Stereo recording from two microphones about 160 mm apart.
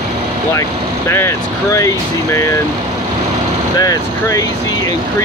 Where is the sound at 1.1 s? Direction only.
15° left (ahead or behind).